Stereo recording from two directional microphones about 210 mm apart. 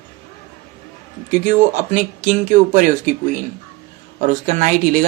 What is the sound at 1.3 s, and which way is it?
Speech, 35° right (ahead or behind).